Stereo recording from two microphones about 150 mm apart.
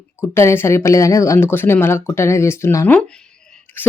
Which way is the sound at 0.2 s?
15° left (ahead or behind).